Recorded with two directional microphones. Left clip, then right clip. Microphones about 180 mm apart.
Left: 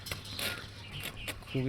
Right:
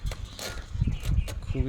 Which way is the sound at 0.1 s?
35° right (ahead or behind).